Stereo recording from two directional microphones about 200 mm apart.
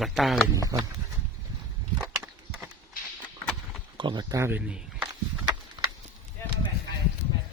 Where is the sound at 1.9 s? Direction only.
15° right (ahead or behind).